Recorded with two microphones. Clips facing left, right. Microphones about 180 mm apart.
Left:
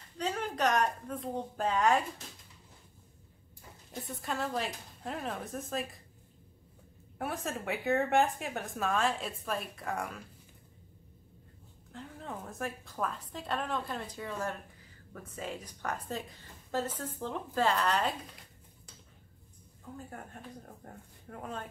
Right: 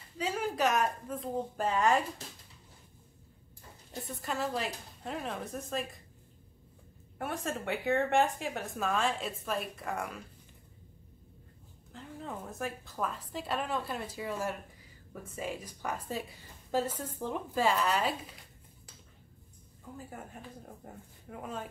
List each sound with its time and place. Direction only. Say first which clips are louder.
0.2 s a woman's voice: right 1 dB; 5° right (ahead or behind)
3.9 s a woman's voice: even; centre (ahead or behind)
7.2 s a woman's voice: right 1 dB; centre (ahead or behind)
11.9 s a woman's voice: right 1 dB; centre (ahead or behind)
20.0 s a woman's voice: right 1 dB; 5° right (ahead or behind)